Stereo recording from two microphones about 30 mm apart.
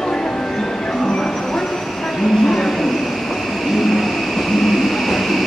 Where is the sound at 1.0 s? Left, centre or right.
Left.